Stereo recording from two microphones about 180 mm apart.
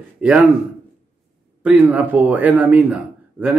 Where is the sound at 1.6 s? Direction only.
10° right (ahead or behind).